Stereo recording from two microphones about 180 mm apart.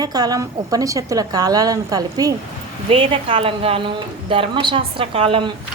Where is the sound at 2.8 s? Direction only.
30° right (ahead or behind).